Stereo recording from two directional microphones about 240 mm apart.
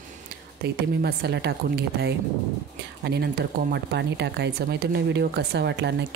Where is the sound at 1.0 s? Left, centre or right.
Right.